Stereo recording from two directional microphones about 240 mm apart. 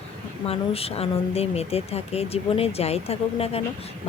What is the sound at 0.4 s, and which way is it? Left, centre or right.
Speech, left.